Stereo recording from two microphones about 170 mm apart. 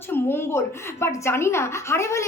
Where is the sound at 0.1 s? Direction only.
15° left (ahead or behind).